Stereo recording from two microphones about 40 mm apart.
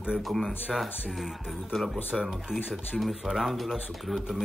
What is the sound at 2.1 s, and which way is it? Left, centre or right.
Speech, centre.